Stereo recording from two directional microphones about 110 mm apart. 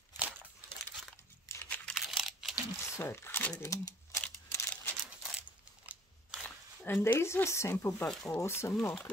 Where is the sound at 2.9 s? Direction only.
20° left (ahead or behind).